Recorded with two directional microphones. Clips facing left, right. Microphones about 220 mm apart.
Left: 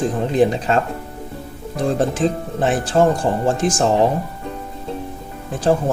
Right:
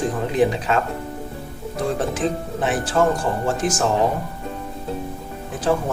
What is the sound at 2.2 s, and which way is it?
Speech, 30° left (ahead or behind).